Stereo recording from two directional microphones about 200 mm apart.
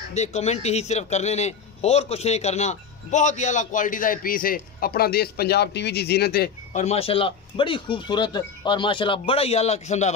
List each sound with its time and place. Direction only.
0.1 s a man's voice: 35° left (ahead or behind)